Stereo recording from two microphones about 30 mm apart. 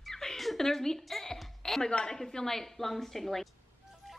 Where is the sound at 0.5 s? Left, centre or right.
Centre.